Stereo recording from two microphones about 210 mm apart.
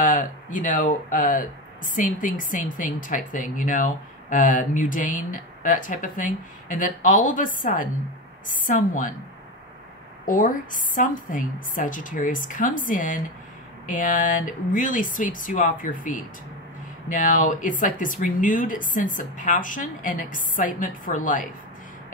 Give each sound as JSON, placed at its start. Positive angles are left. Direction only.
{"t": 0.0, "sound": "speech", "side_deg": 40}
{"t": 10.2, "sound": "speech", "side_deg": 40}